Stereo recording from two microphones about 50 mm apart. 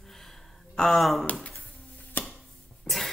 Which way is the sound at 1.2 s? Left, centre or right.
Left.